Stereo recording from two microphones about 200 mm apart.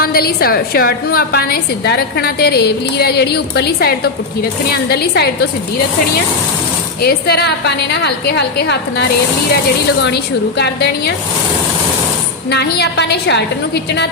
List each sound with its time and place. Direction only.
0.0 s a woman's voice: 50° left (ahead or behind)
7.0 s a woman's voice: 50° left (ahead or behind)
10.6 s a woman's voice: 55° left (ahead or behind)
12.5 s a woman's voice: 55° left (ahead or behind)